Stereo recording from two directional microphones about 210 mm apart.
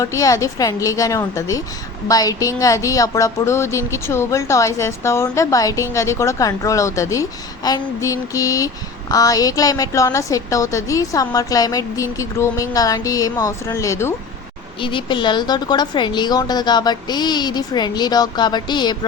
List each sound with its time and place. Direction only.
0.0 s speech: 15° left (ahead or behind)